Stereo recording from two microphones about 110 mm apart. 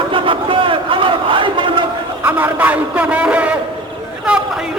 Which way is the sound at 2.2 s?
15° right (ahead or behind).